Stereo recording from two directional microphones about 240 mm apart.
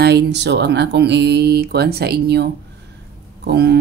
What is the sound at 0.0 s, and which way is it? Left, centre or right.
Speech, right.